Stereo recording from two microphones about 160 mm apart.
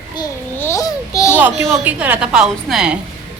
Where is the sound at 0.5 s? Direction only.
15° left (ahead or behind).